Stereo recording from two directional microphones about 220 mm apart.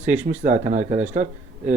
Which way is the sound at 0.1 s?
30° right (ahead or behind).